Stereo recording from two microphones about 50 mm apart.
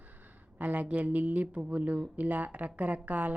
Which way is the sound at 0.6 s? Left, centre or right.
Right.